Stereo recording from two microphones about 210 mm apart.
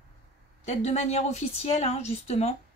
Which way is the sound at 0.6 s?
30° left (ahead or behind).